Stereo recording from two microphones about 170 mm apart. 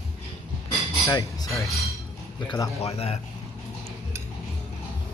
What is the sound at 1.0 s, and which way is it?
Speech, 20° left (ahead or behind).